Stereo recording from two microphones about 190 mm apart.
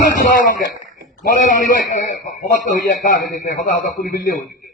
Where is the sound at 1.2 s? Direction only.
45° left (ahead or behind).